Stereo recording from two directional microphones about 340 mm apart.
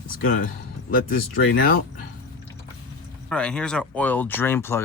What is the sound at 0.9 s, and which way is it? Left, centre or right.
Speech, left.